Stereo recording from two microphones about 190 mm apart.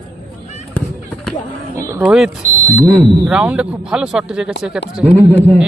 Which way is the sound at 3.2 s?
10° right (ahead or behind).